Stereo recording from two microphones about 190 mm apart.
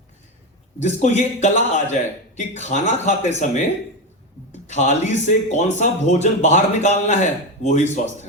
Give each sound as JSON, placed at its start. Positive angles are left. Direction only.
{"t": 0.8, "sound": "speech", "side_deg": 40}